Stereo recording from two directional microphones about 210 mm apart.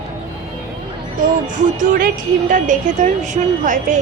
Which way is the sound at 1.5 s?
35° right (ahead or behind).